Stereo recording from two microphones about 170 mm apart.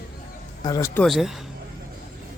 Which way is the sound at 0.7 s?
20° left (ahead or behind).